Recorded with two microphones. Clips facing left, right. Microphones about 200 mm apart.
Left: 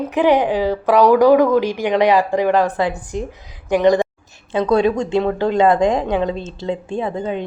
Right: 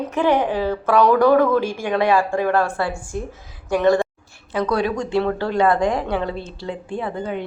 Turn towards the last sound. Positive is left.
turn(degrees=20)  # may be behind; listen again after turning